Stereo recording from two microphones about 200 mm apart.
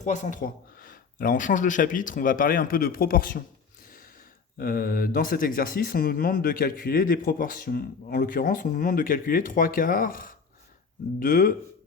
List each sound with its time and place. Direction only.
0.0 s speech: 40° left (ahead or behind)
3.8 s a sound: 45° left (ahead or behind)
4.5 s speech: 45° left (ahead or behind)